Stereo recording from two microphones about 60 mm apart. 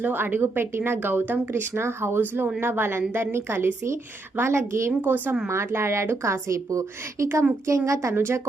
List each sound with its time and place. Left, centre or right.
0.0 s speech: right
4.9 s speech: right
5.5 s a woman's voice: right
8.1 s speech: right